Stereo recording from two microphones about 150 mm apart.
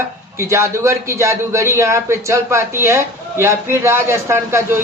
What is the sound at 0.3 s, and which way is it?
A man's voice, 20° right (ahead or behind).